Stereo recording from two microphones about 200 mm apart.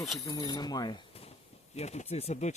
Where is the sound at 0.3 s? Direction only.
20° left (ahead or behind).